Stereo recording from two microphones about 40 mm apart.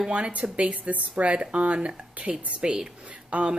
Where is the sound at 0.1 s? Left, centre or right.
Right.